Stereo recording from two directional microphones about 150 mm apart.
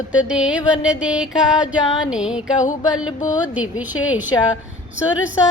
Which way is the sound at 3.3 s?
10° right (ahead or behind).